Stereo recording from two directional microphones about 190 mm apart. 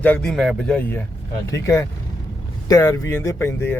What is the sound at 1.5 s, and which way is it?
A man's voice, 15° left (ahead or behind).